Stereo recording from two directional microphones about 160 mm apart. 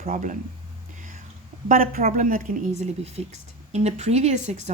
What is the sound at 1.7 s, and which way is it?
A woman's voice, 60° right (ahead or behind).